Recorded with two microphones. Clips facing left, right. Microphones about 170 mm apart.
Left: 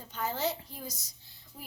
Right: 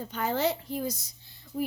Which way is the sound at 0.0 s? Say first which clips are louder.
Right 5 dB; 65° right (ahead or behind).